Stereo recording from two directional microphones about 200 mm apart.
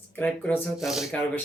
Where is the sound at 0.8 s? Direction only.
Centre (ahead or behind).